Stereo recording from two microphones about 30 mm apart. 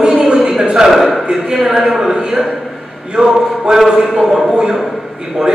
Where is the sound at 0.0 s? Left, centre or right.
Right.